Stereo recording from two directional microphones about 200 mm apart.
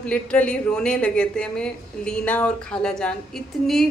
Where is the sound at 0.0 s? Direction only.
5° left (ahead or behind).